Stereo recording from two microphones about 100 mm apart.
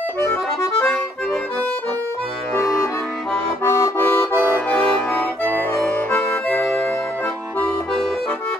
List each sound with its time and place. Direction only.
0.7 s accordion: 5° left (ahead or behind)
3.6 s accordion: 30° left (ahead or behind)
4.3 s accordion: 20° right (ahead or behind)
4.6 s accordion: 15° left (ahead or behind)